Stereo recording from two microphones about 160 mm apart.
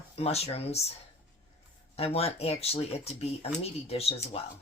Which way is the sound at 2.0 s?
40° left (ahead or behind).